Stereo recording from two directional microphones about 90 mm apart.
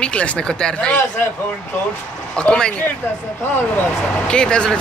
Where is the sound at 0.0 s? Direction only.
15° left (ahead or behind).